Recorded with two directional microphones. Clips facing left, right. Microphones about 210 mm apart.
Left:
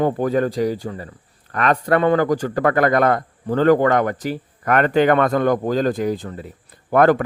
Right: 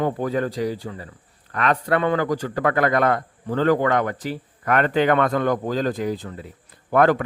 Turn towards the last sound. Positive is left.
turn(degrees=45)  # may be behind; listen again after turning